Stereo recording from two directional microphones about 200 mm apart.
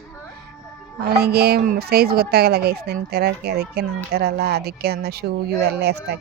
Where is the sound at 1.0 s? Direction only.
50° right (ahead or behind).